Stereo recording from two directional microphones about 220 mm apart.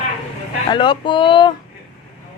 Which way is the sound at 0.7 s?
20° left (ahead or behind).